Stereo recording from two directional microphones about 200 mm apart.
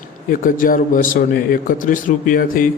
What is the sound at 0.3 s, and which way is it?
A man's voice, 45° left (ahead or behind).